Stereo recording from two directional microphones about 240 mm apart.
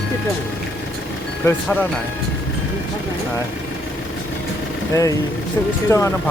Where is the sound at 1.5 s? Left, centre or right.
Centre.